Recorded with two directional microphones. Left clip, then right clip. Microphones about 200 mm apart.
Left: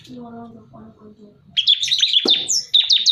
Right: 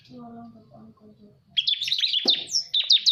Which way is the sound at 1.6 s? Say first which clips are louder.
Left 7 dB; 10° right (ahead or behind).